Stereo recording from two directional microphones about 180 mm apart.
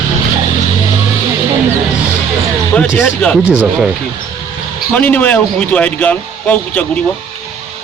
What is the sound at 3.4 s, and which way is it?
Speech, 10° right (ahead or behind).